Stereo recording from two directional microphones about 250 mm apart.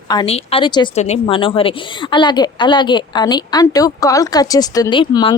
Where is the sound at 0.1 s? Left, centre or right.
Centre.